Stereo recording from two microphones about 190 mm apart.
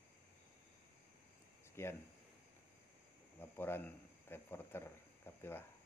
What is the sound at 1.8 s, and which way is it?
Speech, 15° left (ahead or behind).